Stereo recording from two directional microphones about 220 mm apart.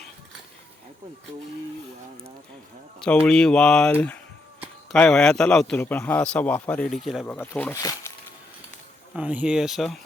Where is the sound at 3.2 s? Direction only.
5° left (ahead or behind).